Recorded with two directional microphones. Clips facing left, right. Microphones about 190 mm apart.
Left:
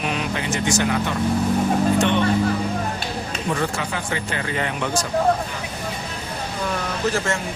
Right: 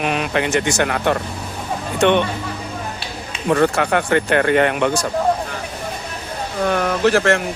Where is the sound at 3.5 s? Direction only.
65° right (ahead or behind).